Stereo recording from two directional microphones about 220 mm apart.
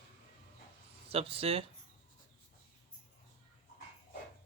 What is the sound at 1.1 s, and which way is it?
Speech, 25° right (ahead or behind).